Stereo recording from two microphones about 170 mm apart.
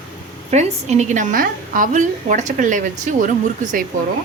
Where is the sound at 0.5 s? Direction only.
45° right (ahead or behind).